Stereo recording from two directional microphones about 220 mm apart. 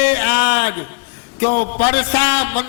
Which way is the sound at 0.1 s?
15° left (ahead or behind).